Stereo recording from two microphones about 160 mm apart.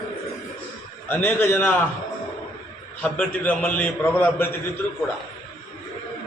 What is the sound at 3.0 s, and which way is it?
A man's voice, 10° left (ahead or behind).